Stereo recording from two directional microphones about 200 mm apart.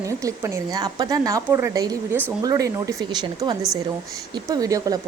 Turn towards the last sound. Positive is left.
turn(degrees=-20)  # may be behind; listen again after turning